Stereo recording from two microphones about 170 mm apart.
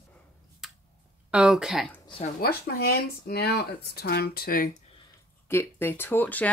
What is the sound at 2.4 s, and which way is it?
Speech, 65° left (ahead or behind).